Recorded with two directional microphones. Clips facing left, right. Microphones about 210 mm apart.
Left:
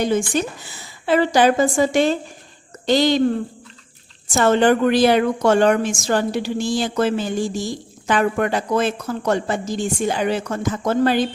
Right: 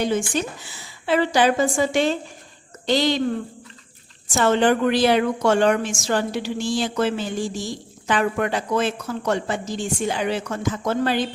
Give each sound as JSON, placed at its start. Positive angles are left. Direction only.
{"t": 0.0, "sound": "a woman's voice", "side_deg": 45}
{"t": 4.3, "sound": "a woman's voice", "side_deg": 45}